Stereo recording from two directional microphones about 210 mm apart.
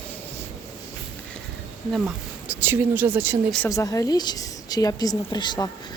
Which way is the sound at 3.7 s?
15° left (ahead or behind).